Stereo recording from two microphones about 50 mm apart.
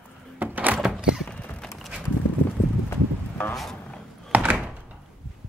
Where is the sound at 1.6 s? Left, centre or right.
Centre.